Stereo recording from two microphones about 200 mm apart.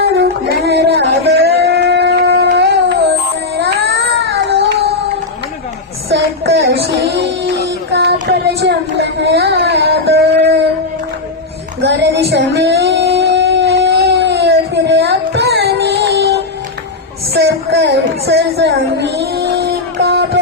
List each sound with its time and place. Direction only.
0.0 s music: 55° right (ahead or behind)
1.4 s a sound: 55° right (ahead or behind)
3.6 s baby cry: 55° right (ahead or behind)
6.1 s child singing: 55° right (ahead or behind)
11.8 s music: 60° right (ahead or behind)
12.3 s a sound: 60° right (ahead or behind)